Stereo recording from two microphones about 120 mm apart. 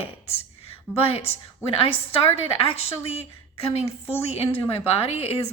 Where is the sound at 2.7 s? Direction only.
55° left (ahead or behind).